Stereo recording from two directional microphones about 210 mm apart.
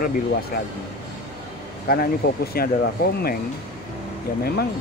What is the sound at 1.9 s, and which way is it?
Speech, 45° left (ahead or behind).